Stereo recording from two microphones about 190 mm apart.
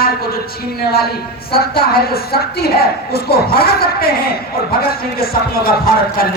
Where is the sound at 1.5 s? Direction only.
55° left (ahead or behind).